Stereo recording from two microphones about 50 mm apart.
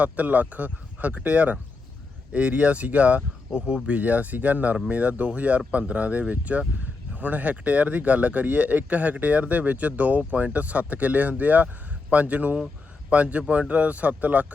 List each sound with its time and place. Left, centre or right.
0.0 s a man's voice: right